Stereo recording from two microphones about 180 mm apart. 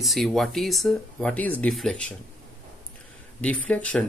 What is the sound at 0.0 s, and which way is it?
Speech, centre (ahead or behind).